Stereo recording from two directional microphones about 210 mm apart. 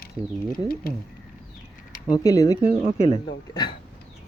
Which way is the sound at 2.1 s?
15° left (ahead or behind).